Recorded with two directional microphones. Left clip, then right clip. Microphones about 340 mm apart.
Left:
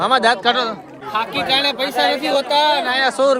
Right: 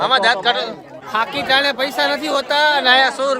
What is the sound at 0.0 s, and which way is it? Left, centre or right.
Speech, centre.